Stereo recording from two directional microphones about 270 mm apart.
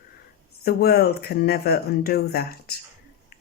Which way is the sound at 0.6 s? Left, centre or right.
Left.